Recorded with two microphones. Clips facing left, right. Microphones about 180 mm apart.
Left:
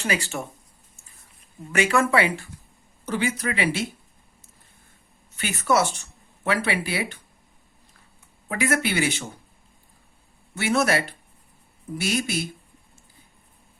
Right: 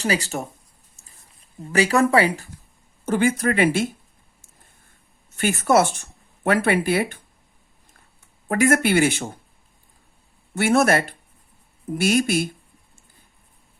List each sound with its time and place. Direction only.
0.0 s speech: 35° right (ahead or behind)
1.7 s speech: 35° right (ahead or behind)
3.1 s speech: 50° right (ahead or behind)
5.3 s speech: 45° right (ahead or behind)
8.4 s speech: 50° right (ahead or behind)
10.5 s speech: 50° right (ahead or behind)